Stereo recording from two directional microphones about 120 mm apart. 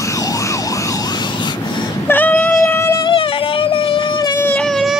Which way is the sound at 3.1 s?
45° left (ahead or behind).